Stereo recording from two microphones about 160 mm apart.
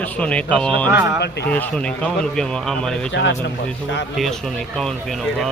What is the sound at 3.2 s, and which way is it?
Speech, 90° left.